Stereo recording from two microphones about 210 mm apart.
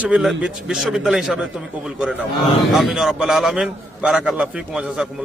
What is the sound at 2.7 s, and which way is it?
A man's voice, centre (ahead or behind).